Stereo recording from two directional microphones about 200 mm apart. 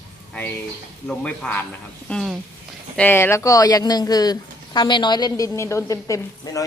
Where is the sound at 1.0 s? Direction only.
5° left (ahead or behind).